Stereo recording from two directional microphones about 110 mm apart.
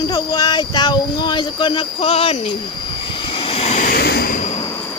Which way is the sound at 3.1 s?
50° left (ahead or behind).